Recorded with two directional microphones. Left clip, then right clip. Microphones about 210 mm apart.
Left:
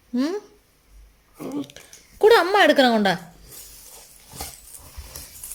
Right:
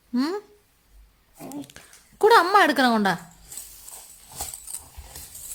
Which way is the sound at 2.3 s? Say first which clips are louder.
Left 1 dB; 30° right (ahead or behind).